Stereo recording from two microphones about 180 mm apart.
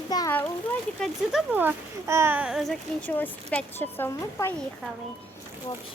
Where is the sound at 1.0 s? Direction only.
5° right (ahead or behind); by 4.5 s 15° left (ahead or behind).